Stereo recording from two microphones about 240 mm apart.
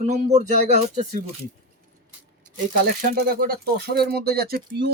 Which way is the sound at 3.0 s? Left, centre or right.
Right.